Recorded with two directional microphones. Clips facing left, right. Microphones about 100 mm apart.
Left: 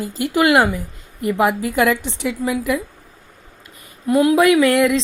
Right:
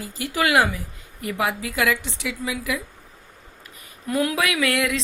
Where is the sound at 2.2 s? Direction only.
45° left (ahead or behind).